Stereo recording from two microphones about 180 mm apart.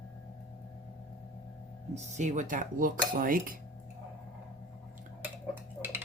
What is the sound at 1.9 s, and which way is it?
Speech, 40° right (ahead or behind).